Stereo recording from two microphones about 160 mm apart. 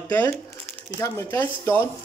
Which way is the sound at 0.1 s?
20° left (ahead or behind).